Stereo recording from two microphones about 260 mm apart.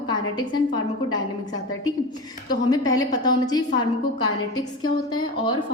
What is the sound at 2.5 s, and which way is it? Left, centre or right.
A woman's voice, centre.